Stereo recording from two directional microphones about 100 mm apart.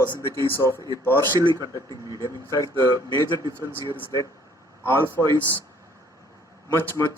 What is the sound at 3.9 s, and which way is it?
Speech, 30° left (ahead or behind).